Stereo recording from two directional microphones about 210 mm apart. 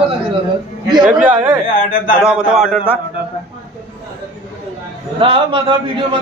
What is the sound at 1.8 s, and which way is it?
Speech, 40° left (ahead or behind).